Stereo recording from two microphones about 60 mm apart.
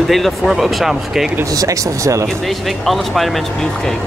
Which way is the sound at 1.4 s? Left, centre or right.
Right.